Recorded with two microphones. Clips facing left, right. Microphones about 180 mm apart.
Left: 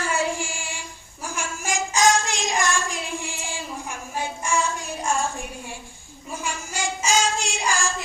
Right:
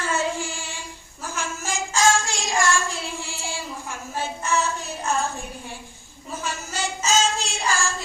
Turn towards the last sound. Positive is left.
turn(degrees=15)  # may be behind; listen again after turning